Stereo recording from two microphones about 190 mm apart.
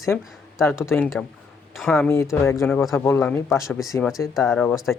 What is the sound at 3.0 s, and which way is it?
Speech, 10° left (ahead or behind).